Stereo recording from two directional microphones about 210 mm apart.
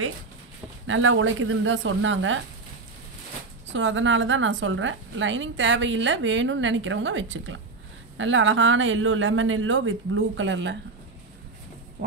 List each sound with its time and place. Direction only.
0.8 s a woman's voice: 70° right (ahead or behind)
3.7 s a woman's voice: 65° right (ahead or behind)